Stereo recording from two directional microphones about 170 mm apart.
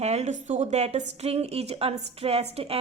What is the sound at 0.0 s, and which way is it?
A woman's voice, 40° right (ahead or behind).